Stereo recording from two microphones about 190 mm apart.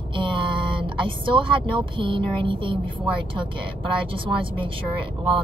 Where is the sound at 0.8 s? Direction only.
25° right (ahead or behind).